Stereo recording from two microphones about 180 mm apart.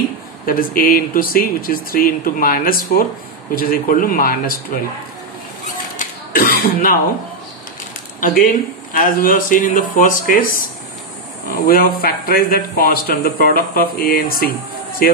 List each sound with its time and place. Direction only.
0.5 s speech: 55° left (ahead or behind)
5.9 s throat clearing: 50° left (ahead or behind)
8.2 s speech: 50° left (ahead or behind)